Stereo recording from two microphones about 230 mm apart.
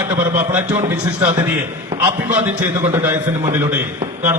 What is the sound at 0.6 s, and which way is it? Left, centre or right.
Speech, right.